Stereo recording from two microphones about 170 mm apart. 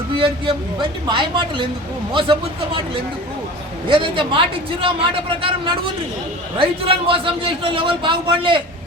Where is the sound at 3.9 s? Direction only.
30° right (ahead or behind).